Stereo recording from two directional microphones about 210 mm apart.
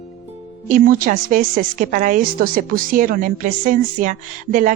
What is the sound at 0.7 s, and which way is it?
A woman's voice, 40° right (ahead or behind).